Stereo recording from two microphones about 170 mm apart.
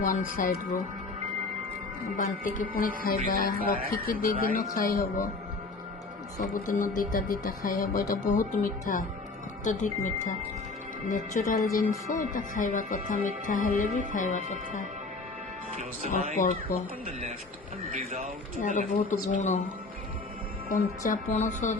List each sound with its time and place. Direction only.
0.0 s speech: 50° left (ahead or behind)
2.1 s a man's voice: 50° left (ahead or behind)
6.5 s a man's voice: 50° left (ahead or behind)
16.1 s a man's voice: 55° left (ahead or behind)
17.9 s speech: 40° right (ahead or behind)
18.6 s speech: 50° left (ahead or behind)
20.7 s speech: 50° left (ahead or behind)